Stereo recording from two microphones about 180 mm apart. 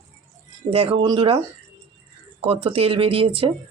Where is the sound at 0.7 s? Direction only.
35° right (ahead or behind).